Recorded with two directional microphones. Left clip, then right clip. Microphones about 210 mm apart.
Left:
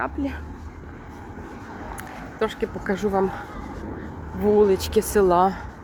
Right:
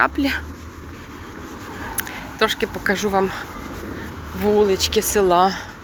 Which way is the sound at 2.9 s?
10° left (ahead or behind).